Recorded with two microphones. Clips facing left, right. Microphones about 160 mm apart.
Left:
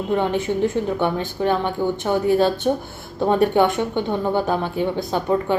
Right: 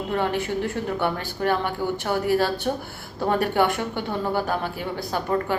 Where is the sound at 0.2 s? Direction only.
20° left (ahead or behind).